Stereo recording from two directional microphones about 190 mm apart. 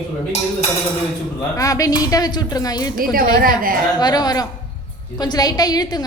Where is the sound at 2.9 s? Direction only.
50° right (ahead or behind).